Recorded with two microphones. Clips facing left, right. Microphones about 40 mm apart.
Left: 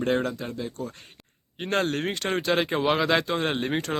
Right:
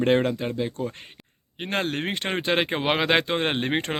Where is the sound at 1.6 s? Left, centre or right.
Centre.